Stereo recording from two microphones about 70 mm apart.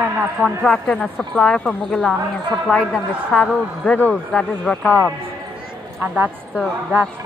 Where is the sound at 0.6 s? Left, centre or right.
Centre.